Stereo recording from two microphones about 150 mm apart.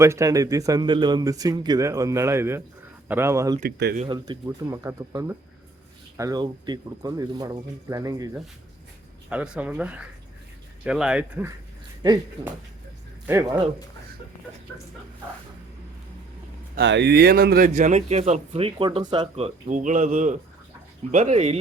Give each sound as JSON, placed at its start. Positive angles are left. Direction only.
{"t": 0.0, "sound": "speech", "side_deg": -20}
{"t": 3.6, "sound": "speech", "side_deg": -90}
{"t": 4.1, "sound": "speech", "side_deg": -25}
{"t": 9.3, "sound": "speech", "side_deg": -5}
{"t": 13.2, "sound": "speech", "side_deg": -20}
{"t": 16.7, "sound": "speech", "side_deg": -90}
{"t": 17.7, "sound": "speech", "side_deg": -50}
{"t": 19.6, "sound": "a man's voice", "side_deg": -55}